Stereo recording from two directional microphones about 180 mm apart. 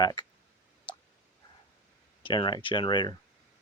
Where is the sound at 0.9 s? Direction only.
25° left (ahead or behind).